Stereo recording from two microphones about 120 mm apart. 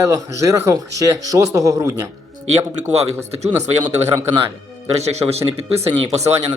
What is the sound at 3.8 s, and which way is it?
Speech, 35° right (ahead or behind).